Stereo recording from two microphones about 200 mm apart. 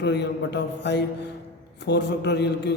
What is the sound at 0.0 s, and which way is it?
Speech, 60° left (ahead or behind).